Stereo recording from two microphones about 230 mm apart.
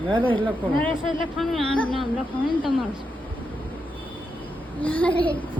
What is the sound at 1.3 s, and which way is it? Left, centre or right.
Speech, centre.